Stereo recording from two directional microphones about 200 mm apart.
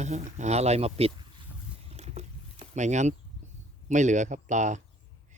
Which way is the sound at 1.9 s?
30° right (ahead or behind).